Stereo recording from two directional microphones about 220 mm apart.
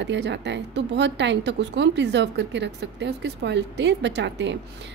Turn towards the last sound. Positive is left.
turn(degrees=-50)  # may be behind; listen again after turning